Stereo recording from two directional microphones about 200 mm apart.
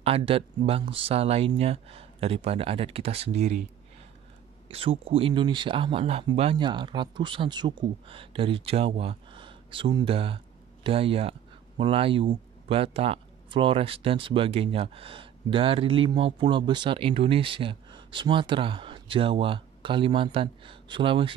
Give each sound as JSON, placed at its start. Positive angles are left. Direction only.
{"t": 0.0, "sound": "speech", "side_deg": -30}
{"t": 4.6, "sound": "speech", "side_deg": -30}